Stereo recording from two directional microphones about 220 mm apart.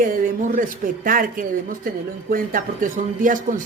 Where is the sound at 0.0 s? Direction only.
40° right (ahead or behind).